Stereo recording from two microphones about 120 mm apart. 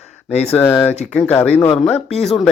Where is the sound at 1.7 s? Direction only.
5° left (ahead or behind).